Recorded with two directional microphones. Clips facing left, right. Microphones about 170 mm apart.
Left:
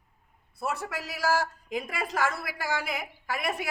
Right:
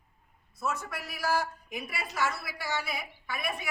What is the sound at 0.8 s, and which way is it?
A woman's voice, 90° left.